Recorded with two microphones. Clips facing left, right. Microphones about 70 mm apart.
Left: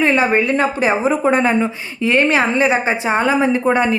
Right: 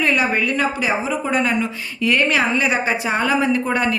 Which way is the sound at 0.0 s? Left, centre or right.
Left.